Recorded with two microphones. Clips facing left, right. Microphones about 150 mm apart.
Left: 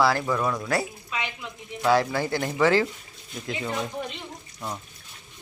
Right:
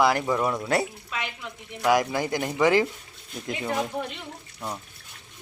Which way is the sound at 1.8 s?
15° right (ahead or behind).